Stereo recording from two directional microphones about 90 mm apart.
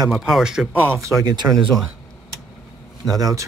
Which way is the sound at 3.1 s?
40° right (ahead or behind).